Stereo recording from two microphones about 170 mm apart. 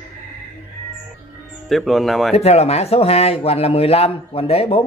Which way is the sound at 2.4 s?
35° left (ahead or behind).